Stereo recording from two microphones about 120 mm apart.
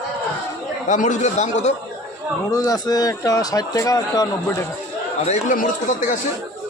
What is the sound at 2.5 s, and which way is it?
A man's voice, 30° left (ahead or behind).